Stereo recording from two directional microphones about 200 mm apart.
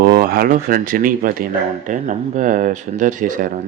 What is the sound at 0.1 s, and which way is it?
Speech, 45° right (ahead or behind).